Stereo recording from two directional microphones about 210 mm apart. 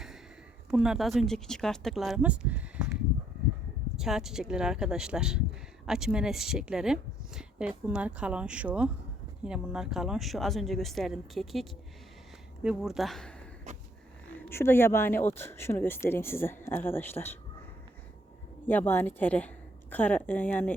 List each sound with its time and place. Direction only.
0.7 s speech: 5° right (ahead or behind)
12.6 s speech: centre (ahead or behind)
14.5 s speech: 10° left (ahead or behind)
18.7 s speech: 10° left (ahead or behind)